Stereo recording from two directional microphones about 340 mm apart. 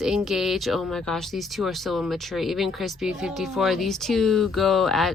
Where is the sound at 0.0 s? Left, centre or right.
Centre.